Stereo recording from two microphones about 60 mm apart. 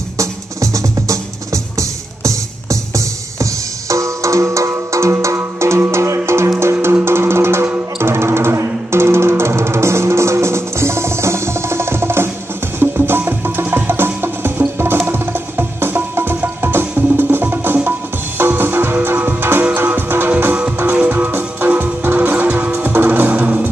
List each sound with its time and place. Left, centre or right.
0.2 s music: right